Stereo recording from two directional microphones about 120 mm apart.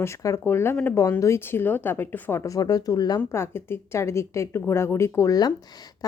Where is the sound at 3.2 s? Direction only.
20° left (ahead or behind).